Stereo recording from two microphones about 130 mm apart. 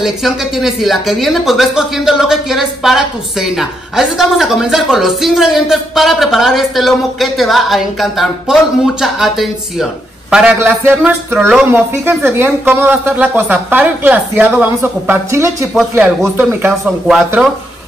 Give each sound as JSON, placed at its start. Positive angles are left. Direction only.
{"t": 0.0, "sound": "speech", "side_deg": 0}